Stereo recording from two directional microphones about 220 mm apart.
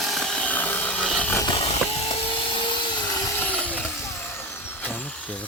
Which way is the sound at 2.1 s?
20° left (ahead or behind).